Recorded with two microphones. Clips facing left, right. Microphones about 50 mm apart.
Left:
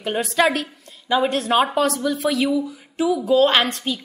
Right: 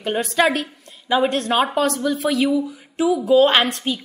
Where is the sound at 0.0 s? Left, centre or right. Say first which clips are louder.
Right 1 dB; centre.